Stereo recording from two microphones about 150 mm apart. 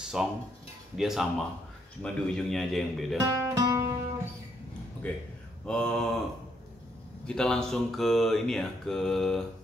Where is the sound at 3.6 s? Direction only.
20° right (ahead or behind).